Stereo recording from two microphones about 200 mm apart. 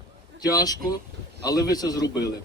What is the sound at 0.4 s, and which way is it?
A man's voice, 20° left (ahead or behind).